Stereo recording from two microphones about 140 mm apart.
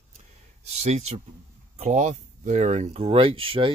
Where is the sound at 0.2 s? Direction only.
55° right (ahead or behind).